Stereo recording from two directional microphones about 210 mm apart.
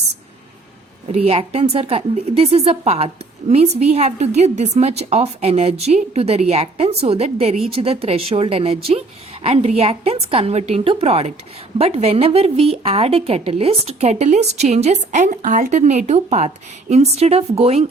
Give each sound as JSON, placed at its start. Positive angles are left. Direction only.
{"t": 1.0, "sound": "a woman's voice", "side_deg": -30}